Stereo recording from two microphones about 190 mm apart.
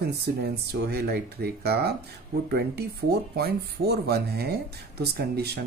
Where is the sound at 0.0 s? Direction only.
60° right (ahead or behind).